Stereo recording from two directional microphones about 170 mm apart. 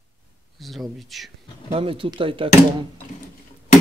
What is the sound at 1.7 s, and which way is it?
Speech, 30° right (ahead or behind).